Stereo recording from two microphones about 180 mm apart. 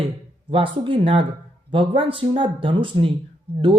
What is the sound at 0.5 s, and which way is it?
Speech, 30° right (ahead or behind).